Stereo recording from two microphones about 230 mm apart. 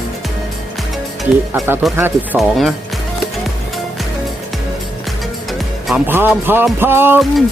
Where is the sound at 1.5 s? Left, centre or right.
Centre.